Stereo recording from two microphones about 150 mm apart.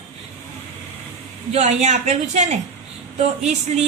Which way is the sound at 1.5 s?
50° right (ahead or behind).